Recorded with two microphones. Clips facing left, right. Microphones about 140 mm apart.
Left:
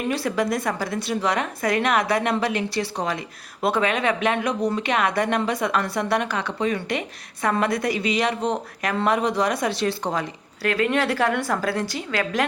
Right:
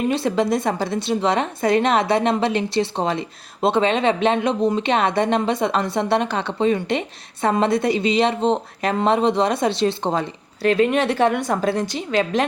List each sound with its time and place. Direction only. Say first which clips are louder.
0.1 s a woman's voice: right 4 dB; 25° right (ahead or behind)